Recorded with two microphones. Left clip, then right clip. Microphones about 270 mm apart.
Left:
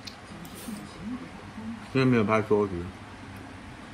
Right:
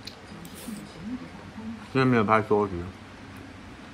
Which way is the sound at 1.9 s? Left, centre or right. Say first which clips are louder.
Right 2 dB; centre.